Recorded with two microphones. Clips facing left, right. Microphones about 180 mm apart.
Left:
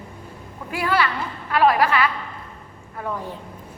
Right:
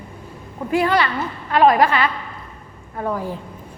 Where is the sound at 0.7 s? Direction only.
40° right (ahead or behind).